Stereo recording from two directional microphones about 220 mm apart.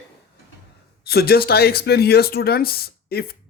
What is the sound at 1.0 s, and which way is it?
Speech, 45° left (ahead or behind).